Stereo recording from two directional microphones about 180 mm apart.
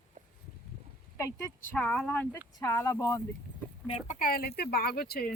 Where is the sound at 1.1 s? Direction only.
15° left (ahead or behind).